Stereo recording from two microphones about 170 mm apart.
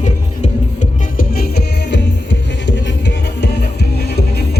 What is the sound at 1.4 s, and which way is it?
Music, 80° left.